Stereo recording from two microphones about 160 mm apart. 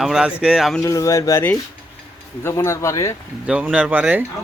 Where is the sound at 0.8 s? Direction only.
20° left (ahead or behind).